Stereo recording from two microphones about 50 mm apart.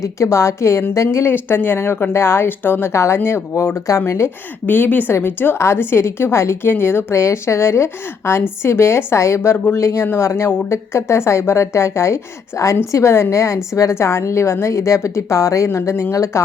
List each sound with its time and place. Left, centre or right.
0.0 s a woman's voice: left
1.0 s speech: left
2.5 s speech: left
2.9 s a woman's voice: left
4.6 s a woman's voice: left
5.5 s a woman's voice: left
6.7 s speech: left
7.1 s a woman's voice: left
12.9 s a woman's voice: left